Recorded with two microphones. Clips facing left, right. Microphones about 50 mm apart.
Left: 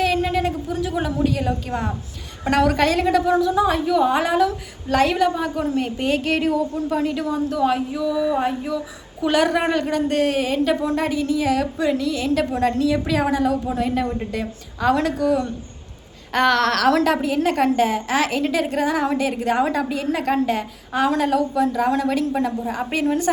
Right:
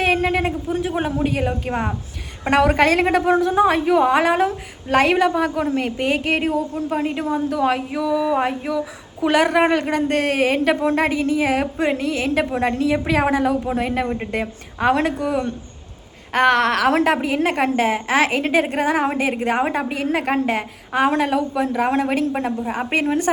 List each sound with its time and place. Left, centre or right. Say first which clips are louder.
0.0 s a woman's voice: right 1 dB; right
6.3 s a woman's voice: even; right
16.3 s a woman's voice: right 2 dB; right